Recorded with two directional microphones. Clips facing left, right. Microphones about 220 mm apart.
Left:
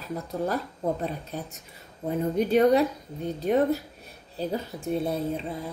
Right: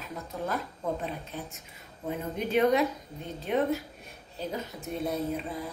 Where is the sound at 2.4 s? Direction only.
35° left (ahead or behind).